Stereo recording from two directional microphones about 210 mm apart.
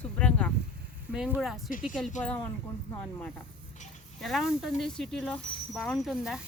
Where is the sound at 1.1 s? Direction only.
5° right (ahead or behind).